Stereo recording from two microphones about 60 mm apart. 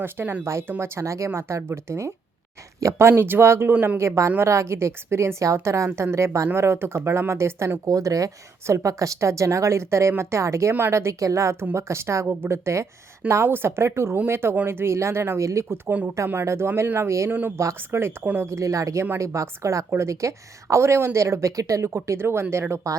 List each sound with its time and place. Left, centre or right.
0.0 s speech: right
0.8 s a woman's voice: right
4.0 s a woman's voice: right
6.5 s a woman's voice: right
7.9 s speech: right
8.6 s a woman's voice: right
15.9 s speech: right
16.3 s a woman's voice: right
17.7 s speech: right
18.4 s speech: right
22.2 s a woman's voice: right